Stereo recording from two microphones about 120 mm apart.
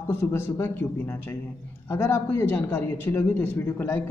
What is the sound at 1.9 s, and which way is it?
A man's voice, 20° left (ahead or behind).